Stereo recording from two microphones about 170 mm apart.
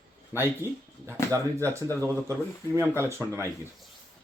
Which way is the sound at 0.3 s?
10° right (ahead or behind).